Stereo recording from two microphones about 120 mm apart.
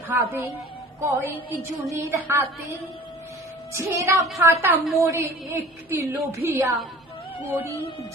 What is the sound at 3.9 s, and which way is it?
A woman's voice, 25° right (ahead or behind).